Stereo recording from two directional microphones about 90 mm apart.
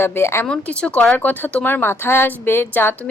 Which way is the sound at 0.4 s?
10° left (ahead or behind).